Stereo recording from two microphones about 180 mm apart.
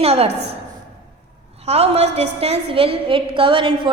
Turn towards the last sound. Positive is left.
turn(degrees=-30)  # may be behind; listen again after turning